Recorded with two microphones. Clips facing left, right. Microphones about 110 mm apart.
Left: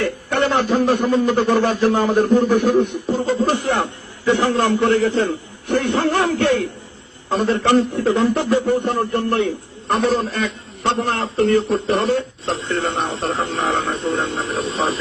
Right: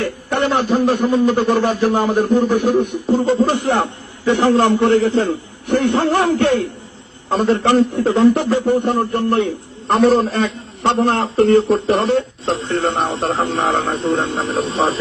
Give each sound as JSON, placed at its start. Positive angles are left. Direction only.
{"t": 0.0, "sound": "a man's voice", "side_deg": -15}
{"t": 7.9, "sound": "a man's voice", "side_deg": -25}
{"t": 9.8, "sound": "a man's voice", "side_deg": -35}